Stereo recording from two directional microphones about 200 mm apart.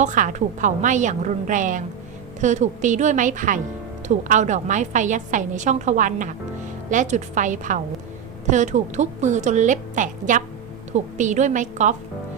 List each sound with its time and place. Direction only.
0.0 s a woman's voice: 40° right (ahead or behind)